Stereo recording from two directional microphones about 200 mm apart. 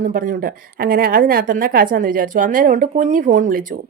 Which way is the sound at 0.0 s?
45° right (ahead or behind).